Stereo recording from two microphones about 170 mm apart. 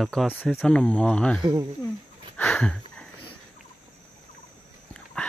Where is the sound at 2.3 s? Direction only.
5° left (ahead or behind).